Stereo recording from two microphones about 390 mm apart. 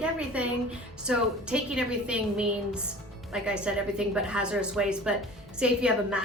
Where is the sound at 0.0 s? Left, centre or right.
Centre.